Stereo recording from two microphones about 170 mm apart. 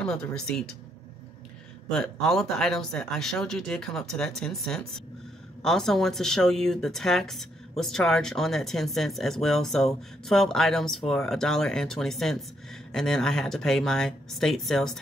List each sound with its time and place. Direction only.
0.0 s speech: 5° left (ahead or behind)
1.9 s speech: 5° left (ahead or behind)